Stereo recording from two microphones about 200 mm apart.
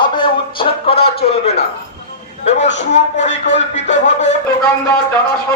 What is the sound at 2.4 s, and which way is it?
Music, 35° left (ahead or behind).